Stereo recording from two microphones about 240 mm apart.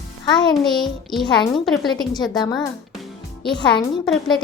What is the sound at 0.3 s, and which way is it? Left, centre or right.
Speech, centre.